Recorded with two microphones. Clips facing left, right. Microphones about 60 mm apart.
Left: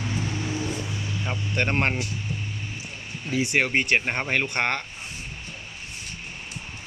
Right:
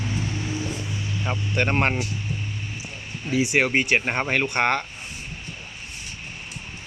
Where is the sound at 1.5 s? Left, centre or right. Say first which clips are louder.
Right 2 dB; centre.